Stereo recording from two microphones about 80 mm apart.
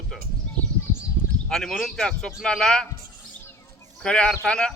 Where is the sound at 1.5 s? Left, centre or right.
Centre.